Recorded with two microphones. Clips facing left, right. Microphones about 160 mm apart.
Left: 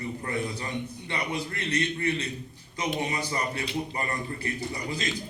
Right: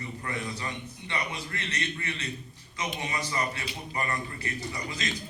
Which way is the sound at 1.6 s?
35° left (ahead or behind).